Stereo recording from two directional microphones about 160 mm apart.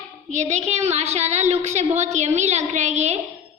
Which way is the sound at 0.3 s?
45° right (ahead or behind).